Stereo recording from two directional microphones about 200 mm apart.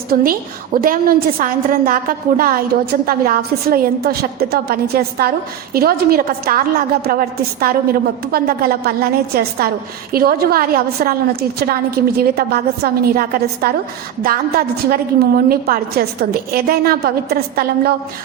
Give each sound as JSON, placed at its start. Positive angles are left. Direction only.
{"t": 0.1, "sound": "a woman's voice", "side_deg": -45}